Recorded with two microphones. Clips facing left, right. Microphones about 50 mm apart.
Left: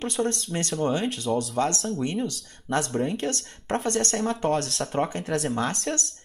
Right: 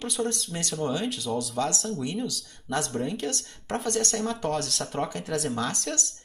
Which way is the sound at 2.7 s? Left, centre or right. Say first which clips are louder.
Left 3 dB; left.